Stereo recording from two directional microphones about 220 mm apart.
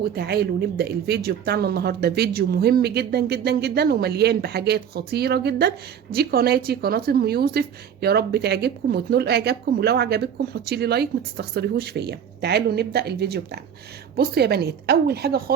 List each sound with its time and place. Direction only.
0.2 s speech: 45° right (ahead or behind)